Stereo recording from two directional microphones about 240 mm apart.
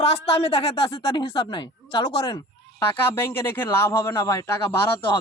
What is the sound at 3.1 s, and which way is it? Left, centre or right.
Speech, centre.